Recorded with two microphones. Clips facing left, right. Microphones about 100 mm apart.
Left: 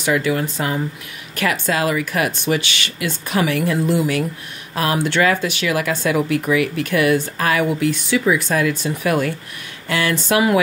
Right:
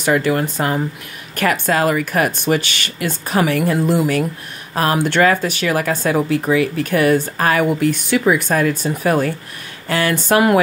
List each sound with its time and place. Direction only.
0.0 s speech: 45° right (ahead or behind)